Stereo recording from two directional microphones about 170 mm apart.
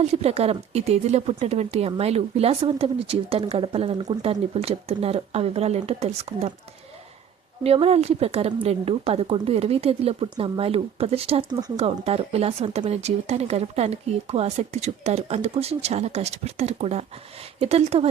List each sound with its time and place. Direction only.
0.0 s speech: 40° right (ahead or behind)
7.6 s speech: 35° right (ahead or behind)